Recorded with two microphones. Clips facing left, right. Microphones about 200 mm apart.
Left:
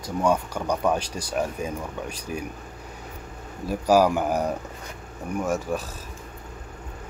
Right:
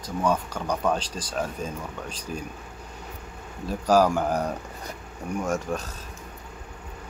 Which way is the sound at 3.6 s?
10° left (ahead or behind).